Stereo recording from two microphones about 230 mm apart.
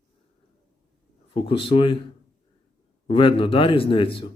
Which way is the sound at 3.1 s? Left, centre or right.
Left.